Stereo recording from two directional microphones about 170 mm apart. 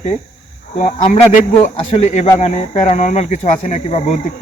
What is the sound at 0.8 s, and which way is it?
Speech, 45° left (ahead or behind).